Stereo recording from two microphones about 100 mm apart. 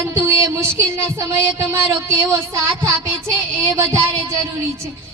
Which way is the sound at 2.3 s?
30° right (ahead or behind).